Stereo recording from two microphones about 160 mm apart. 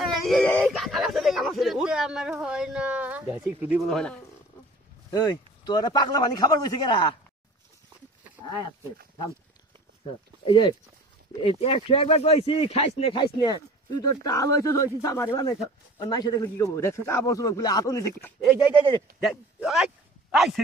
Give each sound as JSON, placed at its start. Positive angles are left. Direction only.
{"t": 0.0, "sound": "a sound", "side_deg": 5}
{"t": 3.9, "sound": "speech", "side_deg": 5}
{"t": 5.1, "sound": "a man's voice", "side_deg": 25}
{"t": 10.4, "sound": "a man's voice", "side_deg": 30}
{"t": 19.1, "sound": "speech", "side_deg": -5}